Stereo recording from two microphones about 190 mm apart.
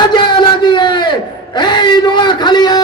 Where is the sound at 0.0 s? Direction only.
25° left (ahead or behind).